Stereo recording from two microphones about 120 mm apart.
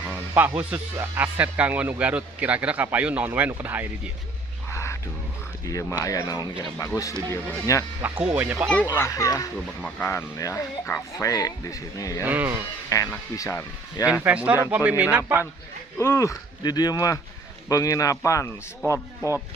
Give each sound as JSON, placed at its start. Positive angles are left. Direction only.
{"t": 0.3, "sound": "speech", "side_deg": -15}
{"t": 4.7, "sound": "a sound", "side_deg": 25}
{"t": 5.6, "sound": "speech", "side_deg": 30}
{"t": 6.8, "sound": "speech", "side_deg": 20}
{"t": 8.2, "sound": "speech", "side_deg": -15}
{"t": 8.6, "sound": "a child's voice", "side_deg": 10}
{"t": 8.9, "sound": "speech", "side_deg": 25}
{"t": 12.2, "sound": "speech", "side_deg": -15}
{"t": 12.9, "sound": "speech", "side_deg": 30}
{"t": 14.1, "sound": "speech", "side_deg": -10}
{"t": 16.0, "sound": "speech", "side_deg": 20}